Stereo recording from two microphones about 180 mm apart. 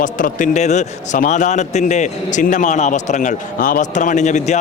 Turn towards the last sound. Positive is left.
turn(degrees=40)  # may be behind; listen again after turning